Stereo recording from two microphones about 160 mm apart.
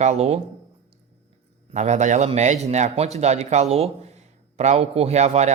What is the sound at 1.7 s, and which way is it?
A man's voice, 50° right (ahead or behind).